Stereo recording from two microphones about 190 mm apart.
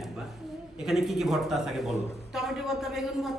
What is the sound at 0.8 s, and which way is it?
A man's voice, centre (ahead or behind).